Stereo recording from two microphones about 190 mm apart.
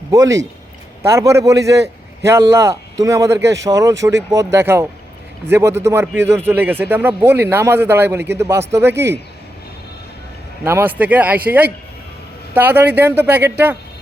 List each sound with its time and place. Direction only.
0.1 s speech: 15° right (ahead or behind)
10.6 s speech: 15° right (ahead or behind)